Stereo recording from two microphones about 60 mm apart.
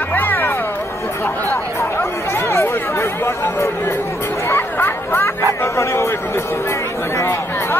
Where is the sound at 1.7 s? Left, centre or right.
Left.